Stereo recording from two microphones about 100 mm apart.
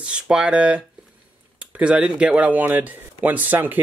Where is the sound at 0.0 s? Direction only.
10° right (ahead or behind).